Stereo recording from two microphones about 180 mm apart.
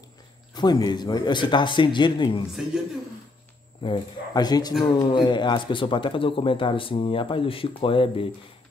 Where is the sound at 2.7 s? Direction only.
5° right (ahead or behind).